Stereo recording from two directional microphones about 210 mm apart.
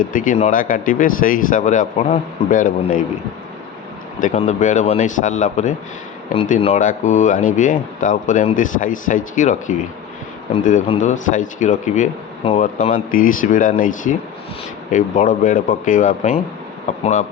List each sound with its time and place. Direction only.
0.0 s speech: 40° left (ahead or behind)
4.2 s speech: 35° left (ahead or behind)